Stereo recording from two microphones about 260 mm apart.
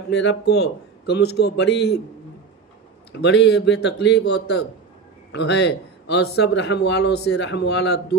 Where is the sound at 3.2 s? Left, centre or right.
Left.